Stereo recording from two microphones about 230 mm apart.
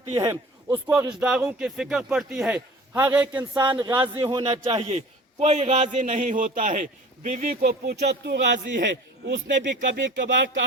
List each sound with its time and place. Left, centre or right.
0.1 s a man's voice: centre
3.8 s a man's voice: centre; by 9.4 s right
9.5 s a man's voice: right